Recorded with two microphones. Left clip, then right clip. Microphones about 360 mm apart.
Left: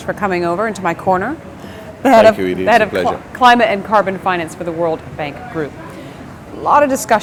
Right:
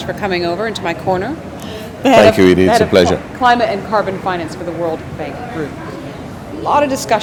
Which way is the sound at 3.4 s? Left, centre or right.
Left.